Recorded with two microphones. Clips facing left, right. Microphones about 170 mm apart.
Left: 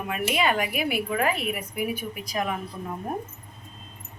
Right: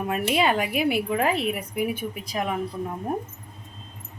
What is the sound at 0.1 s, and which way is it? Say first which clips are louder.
Speech: right 2 dB; 30° right (ahead or behind).